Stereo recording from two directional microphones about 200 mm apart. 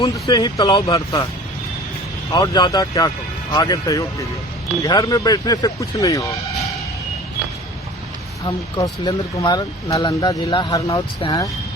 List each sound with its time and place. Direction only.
0.0 s speech: 20° left (ahead or behind)
2.3 s speech: 20° left (ahead or behind)
8.4 s speech: 20° left (ahead or behind)